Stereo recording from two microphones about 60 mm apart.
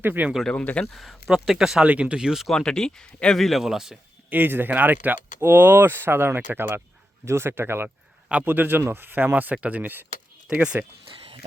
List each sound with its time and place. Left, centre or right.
0.0 s speech: right
0.6 s speech: left
0.9 s speech: centre
1.5 s speech: centre
1.8 s speech: centre
2.5 s speech: centre
3.6 s speech: centre
4.3 s speech: right
10.5 s speech: centre